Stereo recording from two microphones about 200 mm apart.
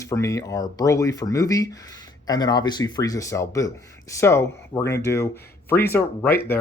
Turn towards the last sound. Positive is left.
turn(degrees=10)  # may be behind; listen again after turning